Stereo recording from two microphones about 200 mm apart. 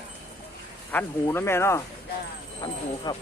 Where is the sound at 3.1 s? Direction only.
20° left (ahead or behind).